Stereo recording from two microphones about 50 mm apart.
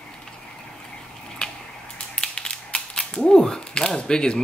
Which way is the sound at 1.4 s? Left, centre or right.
Centre.